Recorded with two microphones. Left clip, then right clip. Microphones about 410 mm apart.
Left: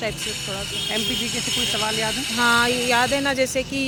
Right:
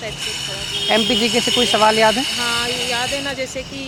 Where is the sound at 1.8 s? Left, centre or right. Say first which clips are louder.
Right 10 dB; right.